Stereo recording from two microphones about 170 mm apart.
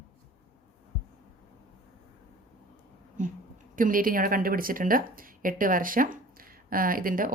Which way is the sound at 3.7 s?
55° right (ahead or behind).